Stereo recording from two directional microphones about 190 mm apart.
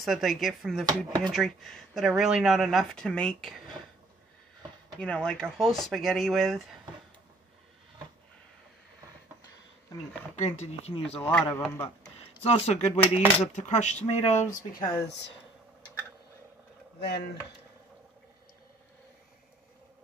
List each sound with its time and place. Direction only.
0.0 s speech: centre (ahead or behind)
1.0 s speech: 20° right (ahead or behind)
1.3 s speech: centre (ahead or behind)
5.0 s speech: 5° left (ahead or behind)
10.3 s speech: 35° left (ahead or behind)
11.1 s a man's voice: 5° left (ahead or behind)
12.2 s speech: 30° left (ahead or behind)
14.7 s speech: 50° left (ahead or behind)
17.0 s speech: 60° left (ahead or behind)